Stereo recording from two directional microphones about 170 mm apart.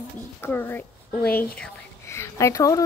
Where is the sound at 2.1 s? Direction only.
15° left (ahead or behind).